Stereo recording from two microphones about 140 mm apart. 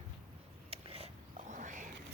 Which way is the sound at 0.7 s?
45° right (ahead or behind).